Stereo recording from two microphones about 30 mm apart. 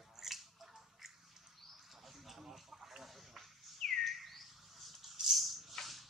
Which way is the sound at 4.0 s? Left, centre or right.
Centre.